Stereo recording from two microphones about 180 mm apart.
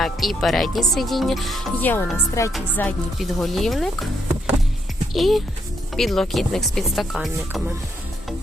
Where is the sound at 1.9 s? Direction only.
15° left (ahead or behind).